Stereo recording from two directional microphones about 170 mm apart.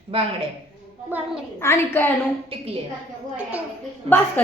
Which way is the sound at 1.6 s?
15° left (ahead or behind).